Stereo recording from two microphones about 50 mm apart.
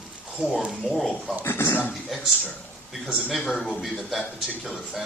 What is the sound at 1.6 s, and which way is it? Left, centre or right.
Speech, left.